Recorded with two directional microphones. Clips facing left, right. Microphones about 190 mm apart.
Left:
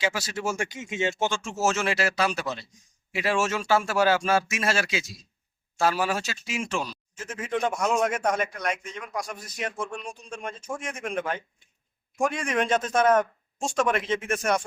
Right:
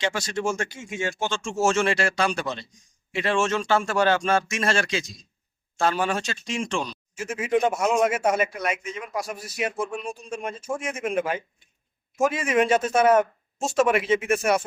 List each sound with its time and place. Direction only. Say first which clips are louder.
0.0 s speech: right 2 dB; 5° left (ahead or behind); by 1.4 s 20° left (ahead or behind)
1.4 s speech: right 4 dB; 5° left (ahead or behind)
7.2 s a man's voice: right 5 dB; 10° right (ahead or behind)